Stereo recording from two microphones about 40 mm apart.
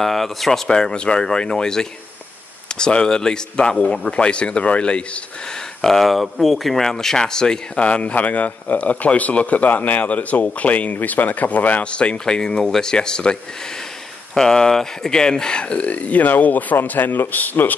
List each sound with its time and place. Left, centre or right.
0.0 s speech: centre
0.7 s speech: centre
5.8 s speech: centre
6.8 s speech: centre
7.8 s speech: left
11.8 s speech: left
12.3 s a man's voice: centre; by 17.7 s left